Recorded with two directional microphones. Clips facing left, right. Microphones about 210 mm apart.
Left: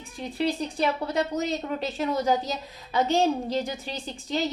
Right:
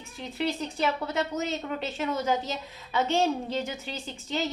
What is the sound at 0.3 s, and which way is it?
A woman's voice, 35° left (ahead or behind).